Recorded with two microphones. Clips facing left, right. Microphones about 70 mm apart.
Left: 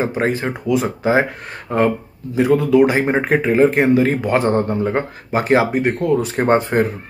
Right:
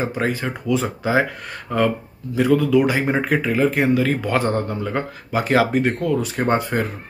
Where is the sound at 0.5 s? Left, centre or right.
Centre.